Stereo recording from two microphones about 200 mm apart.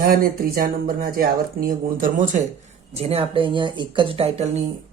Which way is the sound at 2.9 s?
30° right (ahead or behind).